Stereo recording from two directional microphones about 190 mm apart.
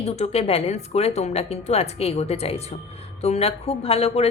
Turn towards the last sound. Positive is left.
turn(degrees=30)  # may be behind; listen again after turning